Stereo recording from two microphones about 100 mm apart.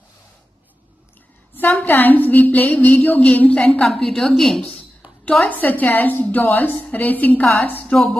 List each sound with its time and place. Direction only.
1.6 s a woman's voice: 15° left (ahead or behind)
7.9 s a woman's voice: 5° left (ahead or behind)